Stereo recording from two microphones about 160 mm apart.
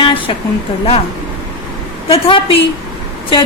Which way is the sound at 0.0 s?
35° left (ahead or behind).